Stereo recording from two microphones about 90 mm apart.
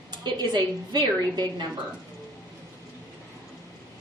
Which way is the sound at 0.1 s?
55° right (ahead or behind).